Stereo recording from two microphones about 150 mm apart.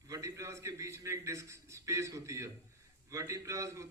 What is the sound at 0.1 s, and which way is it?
A man's voice, 20° right (ahead or behind).